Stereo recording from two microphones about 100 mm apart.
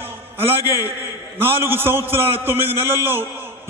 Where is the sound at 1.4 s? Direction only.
25° right (ahead or behind).